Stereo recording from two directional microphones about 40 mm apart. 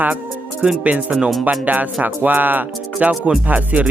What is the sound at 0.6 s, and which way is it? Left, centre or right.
Speech, right.